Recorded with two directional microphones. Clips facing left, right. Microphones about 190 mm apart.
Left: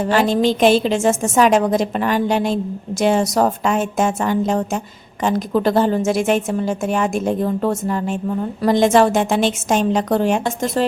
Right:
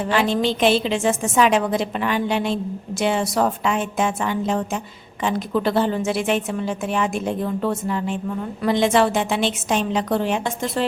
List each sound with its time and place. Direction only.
0.0 s a woman's voice: 45° left (ahead or behind)